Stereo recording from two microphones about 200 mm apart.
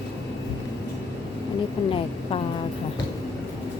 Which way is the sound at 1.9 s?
25° left (ahead or behind).